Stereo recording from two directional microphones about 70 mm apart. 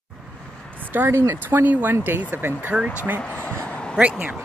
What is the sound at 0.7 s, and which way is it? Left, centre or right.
Speech, right.